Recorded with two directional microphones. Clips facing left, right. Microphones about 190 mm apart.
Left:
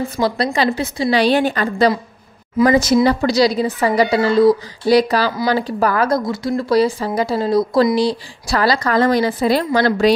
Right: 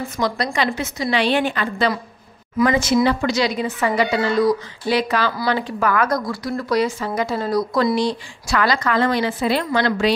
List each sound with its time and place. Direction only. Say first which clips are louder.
0.2 s a woman's voice: left 3 dB; 30° left (ahead or behind)